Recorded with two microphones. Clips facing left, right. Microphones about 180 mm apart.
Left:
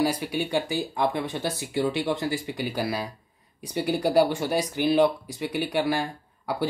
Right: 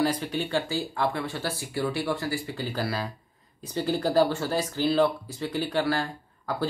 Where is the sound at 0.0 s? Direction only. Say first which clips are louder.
Left 1 dB; 10° left (ahead or behind).